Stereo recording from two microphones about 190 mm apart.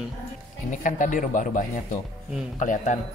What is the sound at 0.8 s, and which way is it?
Speech, 45° left (ahead or behind).